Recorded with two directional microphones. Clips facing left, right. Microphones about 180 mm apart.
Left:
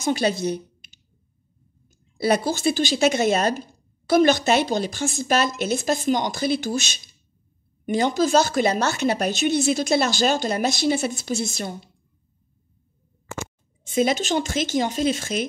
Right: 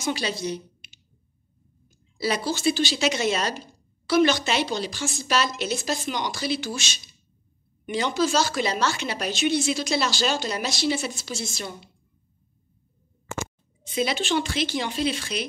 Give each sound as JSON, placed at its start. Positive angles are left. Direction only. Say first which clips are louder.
{"t": 0.1, "sound": "speech", "louder": "left 6 dB", "side_deg": 50}
{"t": 2.1, "sound": "speech", "louder": "left 5 dB", "side_deg": 55}
{"t": 7.8, "sound": "speech", "louder": "left 4 dB", "side_deg": 45}
{"t": 13.8, "sound": "speech", "louder": "left 4 dB", "side_deg": 45}